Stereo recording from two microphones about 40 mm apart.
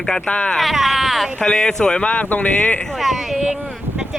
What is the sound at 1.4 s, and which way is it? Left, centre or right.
Speech, centre.